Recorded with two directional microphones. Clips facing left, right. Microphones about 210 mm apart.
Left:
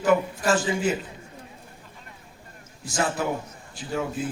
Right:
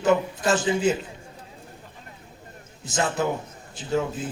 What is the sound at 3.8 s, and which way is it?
Speech, 20° right (ahead or behind).